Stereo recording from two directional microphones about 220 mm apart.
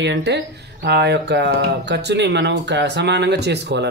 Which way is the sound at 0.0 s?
50° right (ahead or behind).